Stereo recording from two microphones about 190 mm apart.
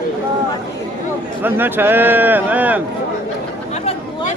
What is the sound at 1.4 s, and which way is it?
A man's voice, 10° right (ahead or behind).